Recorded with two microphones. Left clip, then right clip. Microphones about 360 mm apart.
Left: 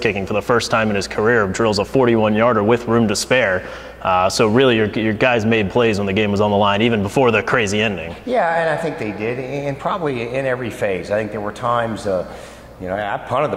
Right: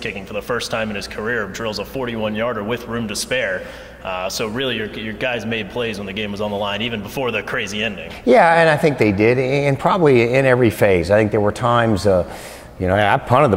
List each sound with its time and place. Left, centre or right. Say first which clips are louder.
0.0 s speech: left 7 dB; left
8.3 s speech: right 6 dB; right
12.8 s speech: right 6 dB; right